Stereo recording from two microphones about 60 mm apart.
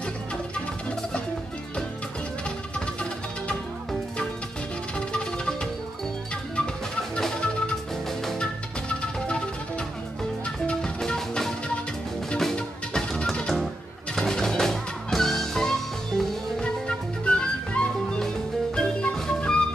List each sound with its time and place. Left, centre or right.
4.9 s music: centre
16.6 s music: centre